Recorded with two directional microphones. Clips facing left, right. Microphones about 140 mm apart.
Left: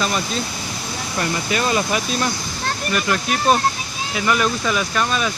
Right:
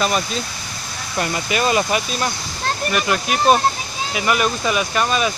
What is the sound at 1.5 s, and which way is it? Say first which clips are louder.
Speech: right 2 dB; 15° right (ahead or behind).